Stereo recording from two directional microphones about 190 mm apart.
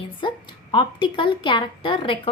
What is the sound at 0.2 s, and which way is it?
A woman's voice, 25° left (ahead or behind).